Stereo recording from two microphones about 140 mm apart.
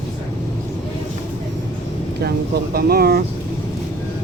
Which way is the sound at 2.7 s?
90° right.